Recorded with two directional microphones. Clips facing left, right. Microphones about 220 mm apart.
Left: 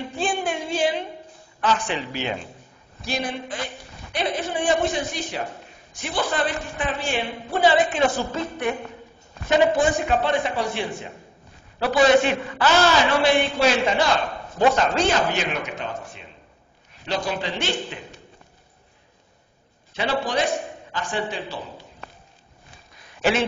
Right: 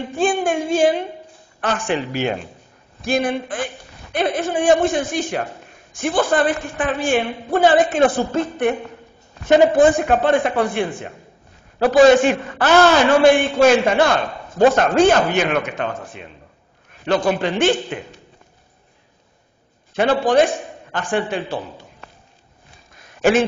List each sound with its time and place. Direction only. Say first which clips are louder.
0.1 s music: right 8 dB; 45° right (ahead or behind)
1.6 s a man's voice: right 3 dB; 50° right (ahead or behind)
9.8 s a man's voice: right 7 dB; 55° right (ahead or behind)
19.9 s a man's voice: right 8 dB; 50° right (ahead or behind)